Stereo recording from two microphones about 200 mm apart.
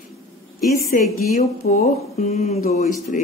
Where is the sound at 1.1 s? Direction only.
40° left (ahead or behind).